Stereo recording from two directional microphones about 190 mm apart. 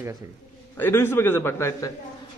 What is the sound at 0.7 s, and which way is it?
A man's voice, 10° left (ahead or behind).